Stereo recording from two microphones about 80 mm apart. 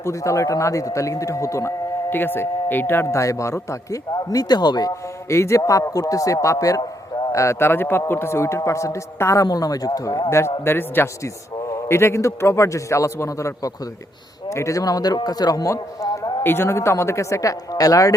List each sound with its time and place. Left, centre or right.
0.0 s a man's voice: left
2.0 s speech: left
3.2 s speech: left
5.3 s speech: left
7.3 s a man's voice: left
16.4 s a man's voice: left